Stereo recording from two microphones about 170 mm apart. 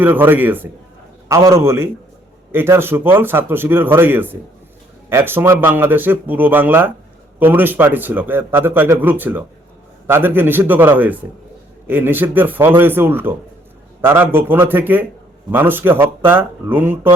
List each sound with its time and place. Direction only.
0.0 s a man's voice: 10° right (ahead or behind)